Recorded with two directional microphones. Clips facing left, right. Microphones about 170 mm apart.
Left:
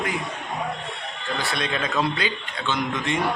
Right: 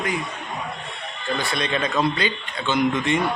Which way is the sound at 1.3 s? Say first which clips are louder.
Right 2 dB; centre (ahead or behind).